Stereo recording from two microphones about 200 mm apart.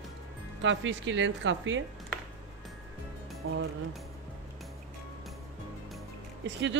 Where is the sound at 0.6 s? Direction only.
70° right (ahead or behind).